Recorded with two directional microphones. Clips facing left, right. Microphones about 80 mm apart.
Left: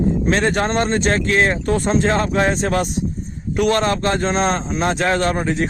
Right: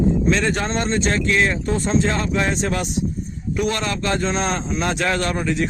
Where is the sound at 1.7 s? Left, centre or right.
Left.